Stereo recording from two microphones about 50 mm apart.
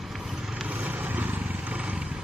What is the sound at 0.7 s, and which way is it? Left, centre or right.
Vehicle, right.